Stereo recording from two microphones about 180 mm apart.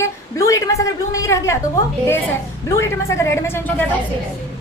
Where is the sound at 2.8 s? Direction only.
15° left (ahead or behind).